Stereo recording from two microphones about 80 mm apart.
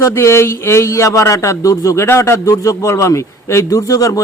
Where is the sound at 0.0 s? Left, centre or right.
Left.